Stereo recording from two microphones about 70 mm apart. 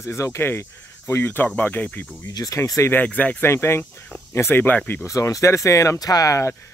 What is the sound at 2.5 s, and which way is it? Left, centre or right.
Speech, left.